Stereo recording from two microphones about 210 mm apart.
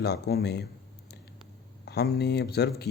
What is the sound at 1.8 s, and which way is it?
Speech, 50° left (ahead or behind).